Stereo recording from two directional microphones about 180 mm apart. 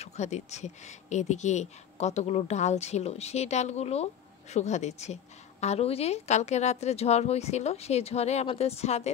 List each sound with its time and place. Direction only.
0.0 s speech: 40° left (ahead or behind)